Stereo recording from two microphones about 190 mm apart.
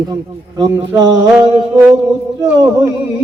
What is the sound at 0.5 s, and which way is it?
Music, 25° right (ahead or behind).